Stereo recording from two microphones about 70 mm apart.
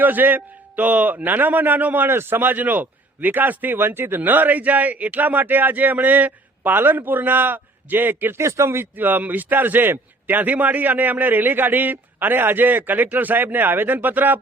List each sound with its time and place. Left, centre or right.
0.0 s a man's voice: right